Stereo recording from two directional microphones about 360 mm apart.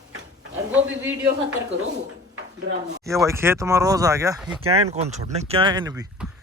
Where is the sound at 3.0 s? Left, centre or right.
Centre.